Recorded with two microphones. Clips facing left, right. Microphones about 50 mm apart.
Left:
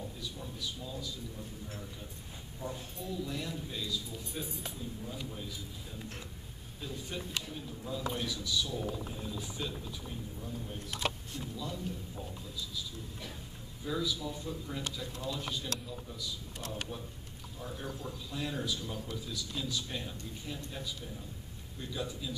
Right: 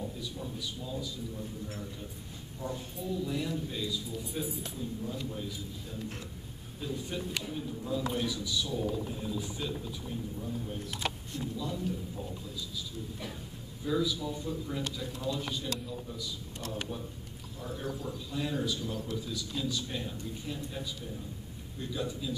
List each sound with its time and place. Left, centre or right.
0.2 s a sound: centre
2.6 s speech: left
3.0 s speech: centre
6.8 s speech: centre
13.8 s speech: centre